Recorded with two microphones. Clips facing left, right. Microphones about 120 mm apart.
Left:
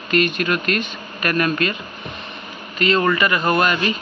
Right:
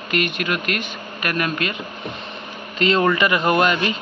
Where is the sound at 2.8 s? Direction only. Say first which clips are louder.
Even; 25° right (ahead or behind).